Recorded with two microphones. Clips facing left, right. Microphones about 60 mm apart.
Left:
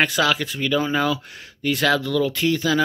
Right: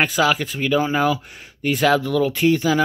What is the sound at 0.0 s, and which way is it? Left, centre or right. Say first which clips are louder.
Speech: right 1 dB; centre.